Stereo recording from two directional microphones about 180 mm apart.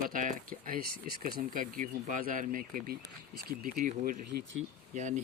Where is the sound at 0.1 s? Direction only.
45° right (ahead or behind).